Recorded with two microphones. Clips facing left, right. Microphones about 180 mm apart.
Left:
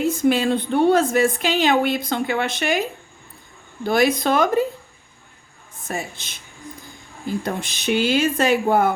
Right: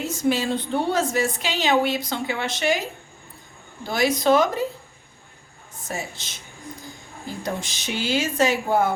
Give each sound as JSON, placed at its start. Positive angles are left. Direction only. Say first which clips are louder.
{"t": 0.1, "sound": "a woman's voice", "louder": "left 4 dB", "side_deg": 55}
{"t": 3.8, "sound": "a woman's voice", "louder": "left 2 dB", "side_deg": 55}
{"t": 5.9, "sound": "a woman's voice", "louder": "left 3 dB", "side_deg": 55}
{"t": 7.4, "sound": "a woman's voice", "louder": "left 1 dB", "side_deg": 60}